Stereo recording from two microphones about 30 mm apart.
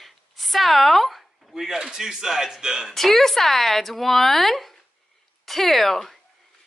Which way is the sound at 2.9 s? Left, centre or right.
Centre.